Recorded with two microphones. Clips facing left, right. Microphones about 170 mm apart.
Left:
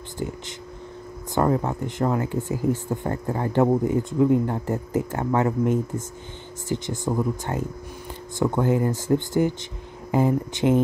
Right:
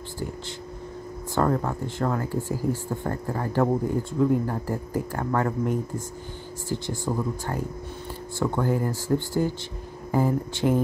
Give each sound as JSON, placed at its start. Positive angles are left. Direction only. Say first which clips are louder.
{"t": 1.3, "sound": "speech", "louder": "left 2 dB", "side_deg": 15}